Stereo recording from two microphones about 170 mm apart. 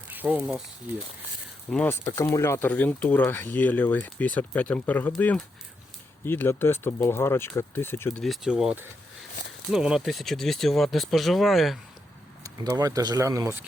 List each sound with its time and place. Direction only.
0.1 s speech: 10° right (ahead or behind)
1.7 s speech: 10° left (ahead or behind)
6.2 s speech: 15° left (ahead or behind)
8.2 s speech: centre (ahead or behind)
12.4 s speech: 20° right (ahead or behind)